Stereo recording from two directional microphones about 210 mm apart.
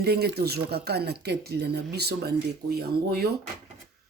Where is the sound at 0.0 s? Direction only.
50° right (ahead or behind).